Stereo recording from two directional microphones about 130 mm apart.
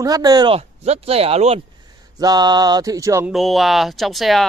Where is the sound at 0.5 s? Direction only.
50° right (ahead or behind).